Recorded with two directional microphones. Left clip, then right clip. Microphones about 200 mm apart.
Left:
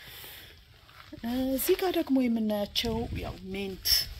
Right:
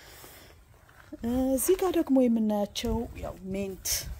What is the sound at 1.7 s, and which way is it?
Speech, 50° right (ahead or behind).